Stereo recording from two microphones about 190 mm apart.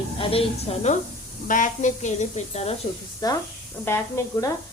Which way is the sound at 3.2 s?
20° left (ahead or behind).